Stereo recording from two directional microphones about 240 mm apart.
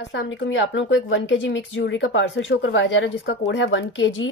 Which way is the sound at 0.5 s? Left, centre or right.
Left.